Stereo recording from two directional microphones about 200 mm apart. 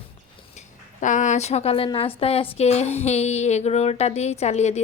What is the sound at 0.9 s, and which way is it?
Speech, 40° left (ahead or behind).